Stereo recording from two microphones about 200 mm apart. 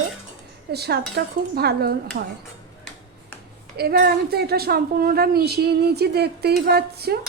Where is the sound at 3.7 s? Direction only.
50° right (ahead or behind).